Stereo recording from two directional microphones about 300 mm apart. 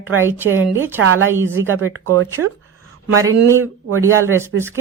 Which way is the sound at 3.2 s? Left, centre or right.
Centre.